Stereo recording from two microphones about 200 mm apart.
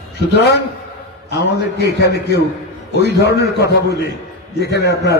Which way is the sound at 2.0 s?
55° left (ahead or behind).